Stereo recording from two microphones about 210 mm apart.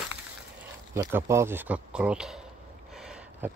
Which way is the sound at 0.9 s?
10° right (ahead or behind).